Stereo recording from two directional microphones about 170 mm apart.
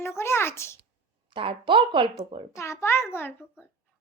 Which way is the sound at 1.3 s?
30° right (ahead or behind).